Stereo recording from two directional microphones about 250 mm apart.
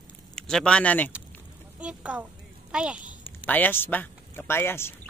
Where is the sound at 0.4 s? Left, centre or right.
Centre.